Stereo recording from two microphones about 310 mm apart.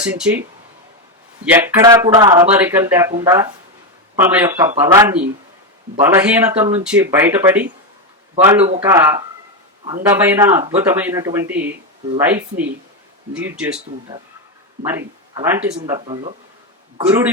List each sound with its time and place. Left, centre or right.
0.0 s speech: centre
1.5 s speech: centre
10.2 s speech: centre
10.6 s speech: right
10.8 s speech: centre